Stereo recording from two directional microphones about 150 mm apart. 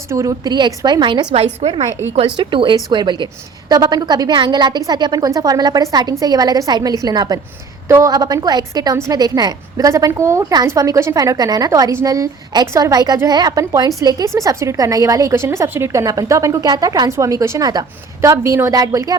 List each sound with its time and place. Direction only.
0.1 s a woman's voice: 20° right (ahead or behind)